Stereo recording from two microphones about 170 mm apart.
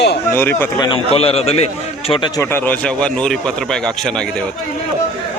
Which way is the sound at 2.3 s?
10° left (ahead or behind).